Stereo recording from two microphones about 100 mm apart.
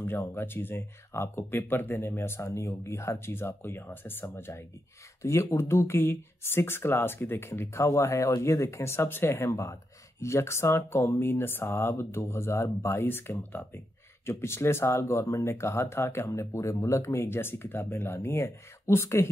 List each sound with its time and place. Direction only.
0.0 s speech: 20° left (ahead or behind)